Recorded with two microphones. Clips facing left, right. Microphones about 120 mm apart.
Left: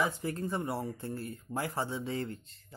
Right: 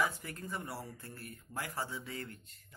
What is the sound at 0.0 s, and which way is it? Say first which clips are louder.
Speech: left 4 dB; 30° left (ahead or behind).